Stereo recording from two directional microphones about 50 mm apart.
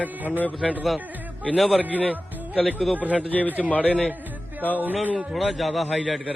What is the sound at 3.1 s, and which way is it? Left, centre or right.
Speech, left.